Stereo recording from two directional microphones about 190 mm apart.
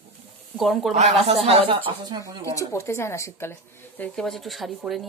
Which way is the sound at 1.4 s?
30° right (ahead or behind).